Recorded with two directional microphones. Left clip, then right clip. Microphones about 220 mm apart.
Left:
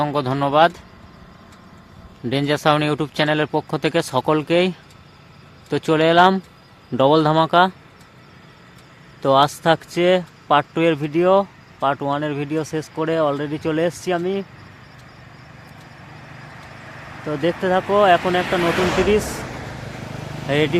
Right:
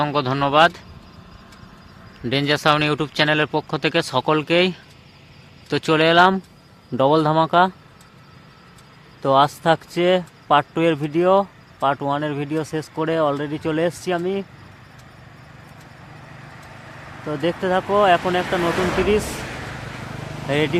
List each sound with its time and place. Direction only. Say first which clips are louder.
0.0 s speech: even; 5° left (ahead or behind)
2.2 s speech: even; 5° left (ahead or behind)
9.2 s speech: left 1 dB; 5° left (ahead or behind)
16.1 s vehicle: left 2 dB; 15° left (ahead or behind)
18.4 s speech: left 2 dB; 30° left (ahead or behind)
19.0 s speech: left 1 dB; 10° left (ahead or behind)
19.3 s a sound: even; 5° right (ahead or behind)
20.5 s speech: left 2 dB; 10° left (ahead or behind)